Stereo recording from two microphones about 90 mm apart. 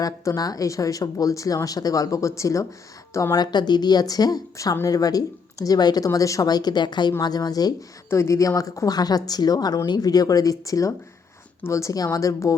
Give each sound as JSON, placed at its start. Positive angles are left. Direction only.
{"t": 0.0, "sound": "speech", "side_deg": 45}
{"t": 3.3, "sound": "a woman's voice", "side_deg": 50}
{"t": 6.1, "sound": "a woman's voice", "side_deg": 35}
{"t": 8.1, "sound": "a woman's voice", "side_deg": 35}